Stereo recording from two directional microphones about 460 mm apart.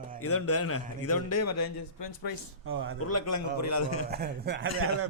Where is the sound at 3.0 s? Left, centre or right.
Left.